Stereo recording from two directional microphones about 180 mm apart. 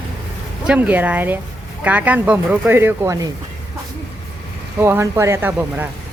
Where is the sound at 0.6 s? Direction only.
10° right (ahead or behind).